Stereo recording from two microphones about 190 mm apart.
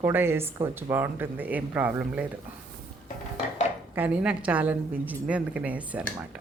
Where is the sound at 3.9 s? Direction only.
5° right (ahead or behind).